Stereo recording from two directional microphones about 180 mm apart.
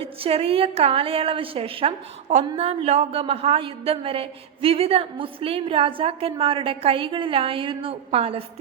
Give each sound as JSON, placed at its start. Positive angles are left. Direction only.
{"t": 0.0, "sound": "a woman's voice", "side_deg": -30}